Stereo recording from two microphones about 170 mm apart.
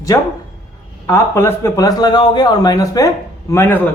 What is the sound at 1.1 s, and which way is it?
A man's voice, 15° left (ahead or behind).